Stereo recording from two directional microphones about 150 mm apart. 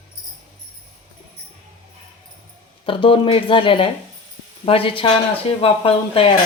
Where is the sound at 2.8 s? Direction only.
35° left (ahead or behind).